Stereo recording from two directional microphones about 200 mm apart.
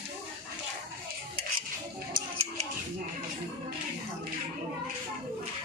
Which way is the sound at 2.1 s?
30° right (ahead or behind).